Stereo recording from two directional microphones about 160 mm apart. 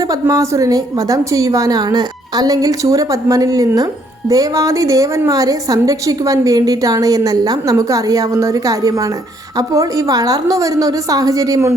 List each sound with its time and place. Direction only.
0.1 s a woman's voice: 20° right (ahead or behind)